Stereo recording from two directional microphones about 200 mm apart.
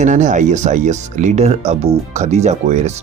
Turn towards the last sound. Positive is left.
turn(degrees=-35)  # may be behind; listen again after turning